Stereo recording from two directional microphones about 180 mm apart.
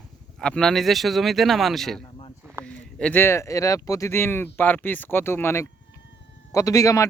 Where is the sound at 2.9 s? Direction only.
10° left (ahead or behind).